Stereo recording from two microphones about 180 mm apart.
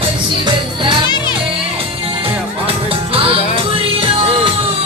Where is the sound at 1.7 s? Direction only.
30° right (ahead or behind).